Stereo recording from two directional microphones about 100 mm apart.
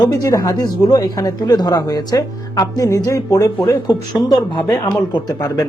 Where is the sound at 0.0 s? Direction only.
35° left (ahead or behind).